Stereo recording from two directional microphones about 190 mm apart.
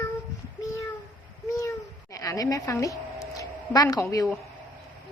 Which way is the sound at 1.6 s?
15° left (ahead or behind).